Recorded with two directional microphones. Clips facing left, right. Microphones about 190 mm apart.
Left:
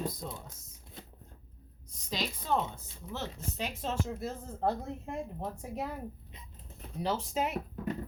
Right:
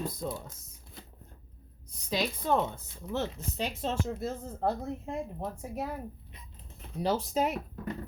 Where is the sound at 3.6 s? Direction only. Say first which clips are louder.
Right 3 dB; 30° right (ahead or behind).